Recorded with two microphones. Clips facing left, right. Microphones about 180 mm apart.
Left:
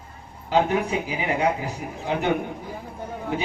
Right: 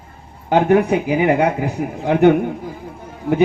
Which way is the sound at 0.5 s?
65° right (ahead or behind).